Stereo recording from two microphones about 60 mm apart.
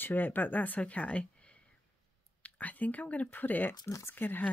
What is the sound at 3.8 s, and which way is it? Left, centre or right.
Speech, left.